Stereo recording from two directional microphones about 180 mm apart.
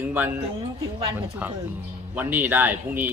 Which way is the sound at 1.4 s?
10° right (ahead or behind).